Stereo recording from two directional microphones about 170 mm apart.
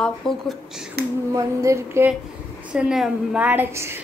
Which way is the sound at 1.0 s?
70° right (ahead or behind).